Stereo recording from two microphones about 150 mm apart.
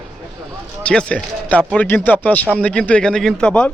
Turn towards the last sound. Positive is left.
turn(degrees=5)  # may be behind; listen again after turning